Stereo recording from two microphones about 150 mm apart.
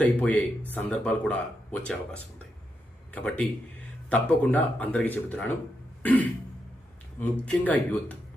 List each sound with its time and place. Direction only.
0.0 s speech: 10° left (ahead or behind)
6.0 s throat clearing: 10° left (ahead or behind)
7.2 s speech: 10° left (ahead or behind)